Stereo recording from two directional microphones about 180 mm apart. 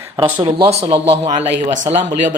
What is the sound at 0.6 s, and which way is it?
Speech, 35° right (ahead or behind).